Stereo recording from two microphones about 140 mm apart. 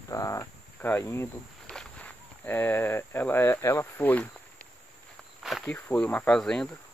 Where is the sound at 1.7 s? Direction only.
5° left (ahead or behind).